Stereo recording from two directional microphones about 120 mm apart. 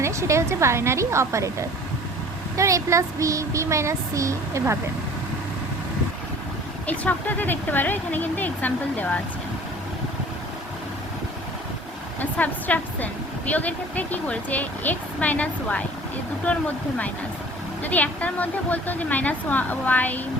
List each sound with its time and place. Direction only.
0.0 s speech: 25° right (ahead or behind)
2.6 s speech: 25° right (ahead or behind)
6.8 s speech: 10° left (ahead or behind)
12.2 s speech: 15° left (ahead or behind)